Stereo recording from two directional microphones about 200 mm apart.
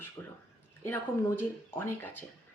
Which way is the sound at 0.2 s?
15° left (ahead or behind).